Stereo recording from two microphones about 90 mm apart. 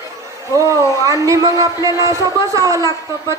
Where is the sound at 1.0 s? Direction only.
40° right (ahead or behind).